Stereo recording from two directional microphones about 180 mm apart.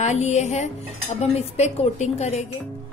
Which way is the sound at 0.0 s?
40° left (ahead or behind).